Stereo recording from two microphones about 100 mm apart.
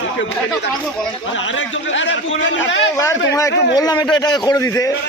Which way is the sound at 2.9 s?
35° left (ahead or behind).